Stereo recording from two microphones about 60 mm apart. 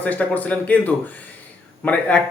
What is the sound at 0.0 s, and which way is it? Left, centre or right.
A man's voice, left.